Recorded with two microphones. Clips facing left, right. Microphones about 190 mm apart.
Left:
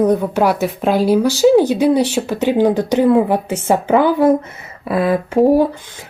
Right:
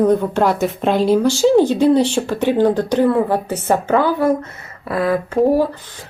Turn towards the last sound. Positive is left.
turn(degrees=15)  # may be behind; listen again after turning